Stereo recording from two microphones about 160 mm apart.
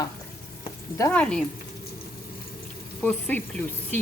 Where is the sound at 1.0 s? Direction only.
10° left (ahead or behind).